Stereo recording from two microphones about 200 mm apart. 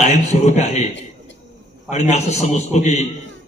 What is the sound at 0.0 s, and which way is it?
A man's voice, 35° left (ahead or behind).